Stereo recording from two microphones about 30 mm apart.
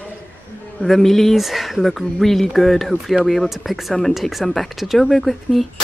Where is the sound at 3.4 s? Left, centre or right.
Centre.